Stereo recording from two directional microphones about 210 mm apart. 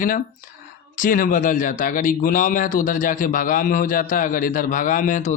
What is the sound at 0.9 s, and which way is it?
Speech, 40° left (ahead or behind).